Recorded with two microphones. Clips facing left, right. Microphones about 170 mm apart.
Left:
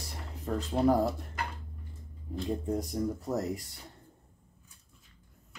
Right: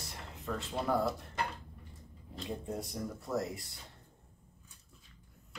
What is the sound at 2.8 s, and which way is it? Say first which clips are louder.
Speech: left 7 dB; 40° left (ahead or behind).